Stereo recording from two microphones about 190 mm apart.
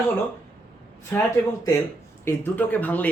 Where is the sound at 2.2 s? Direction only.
10° left (ahead or behind).